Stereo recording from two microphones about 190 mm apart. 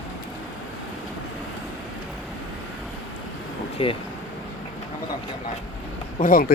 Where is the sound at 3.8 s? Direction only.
30° left (ahead or behind).